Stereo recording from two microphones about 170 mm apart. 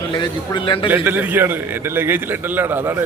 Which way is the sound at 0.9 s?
10° right (ahead or behind).